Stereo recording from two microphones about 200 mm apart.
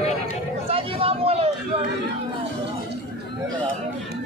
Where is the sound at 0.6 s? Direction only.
30° right (ahead or behind).